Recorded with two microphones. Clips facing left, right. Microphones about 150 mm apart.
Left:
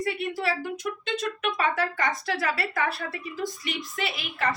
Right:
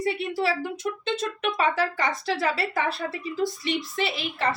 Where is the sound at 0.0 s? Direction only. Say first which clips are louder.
Right 3 dB; 30° right (ahead or behind).